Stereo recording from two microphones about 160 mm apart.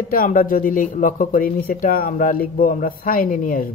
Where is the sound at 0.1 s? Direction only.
60° left (ahead or behind).